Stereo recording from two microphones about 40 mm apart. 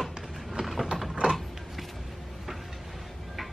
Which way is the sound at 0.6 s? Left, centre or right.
Centre.